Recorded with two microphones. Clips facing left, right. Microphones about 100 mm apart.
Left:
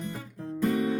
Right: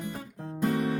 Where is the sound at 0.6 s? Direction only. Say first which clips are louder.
Left 1 dB; 30° right (ahead or behind).